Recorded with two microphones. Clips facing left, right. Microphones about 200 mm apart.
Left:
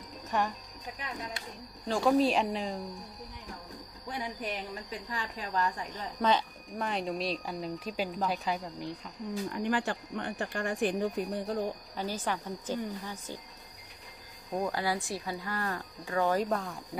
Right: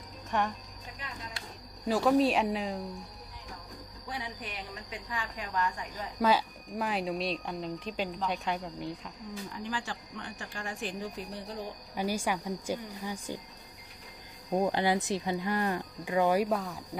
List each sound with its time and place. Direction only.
0.3 s speech: centre (ahead or behind)
1.9 s speech: centre (ahead or behind)
4.1 s speech: 40° left (ahead or behind)
5.9 s speech: 5° right (ahead or behind)
9.5 s speech: 60° left (ahead or behind)
11.9 s speech: 10° right (ahead or behind)
14.7 s speech: 20° right (ahead or behind); by 16.8 s 5° right (ahead or behind)